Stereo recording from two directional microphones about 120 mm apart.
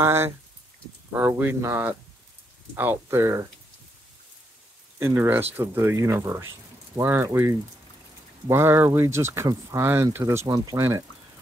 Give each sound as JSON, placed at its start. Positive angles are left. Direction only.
{"t": 0.0, "sound": "speech", "side_deg": -20}
{"t": 4.9, "sound": "speech", "side_deg": -20}
{"t": 8.5, "sound": "speech", "side_deg": -20}